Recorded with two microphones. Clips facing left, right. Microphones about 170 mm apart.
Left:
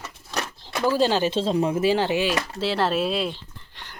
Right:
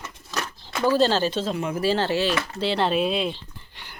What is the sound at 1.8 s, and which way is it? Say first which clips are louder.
Speech: left 1 dB; 15° left (ahead or behind).